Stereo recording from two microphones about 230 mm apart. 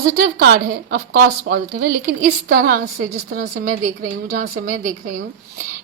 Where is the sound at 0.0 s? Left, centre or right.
Right.